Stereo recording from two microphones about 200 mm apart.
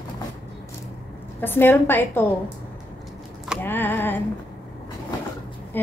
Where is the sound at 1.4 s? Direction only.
10° left (ahead or behind).